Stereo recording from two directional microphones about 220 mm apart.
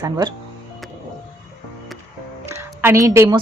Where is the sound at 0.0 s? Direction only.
20° right (ahead or behind).